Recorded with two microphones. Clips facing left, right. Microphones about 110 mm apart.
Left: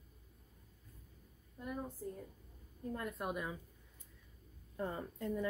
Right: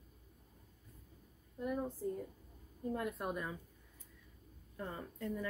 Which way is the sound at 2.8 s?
10° right (ahead or behind).